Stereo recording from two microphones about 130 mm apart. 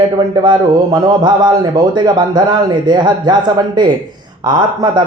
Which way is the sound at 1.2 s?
30° right (ahead or behind).